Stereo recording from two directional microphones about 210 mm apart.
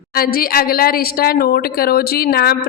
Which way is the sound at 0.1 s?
45° left (ahead or behind).